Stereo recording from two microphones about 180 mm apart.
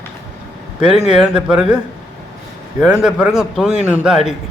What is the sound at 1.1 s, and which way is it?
Speech, 5° right (ahead or behind).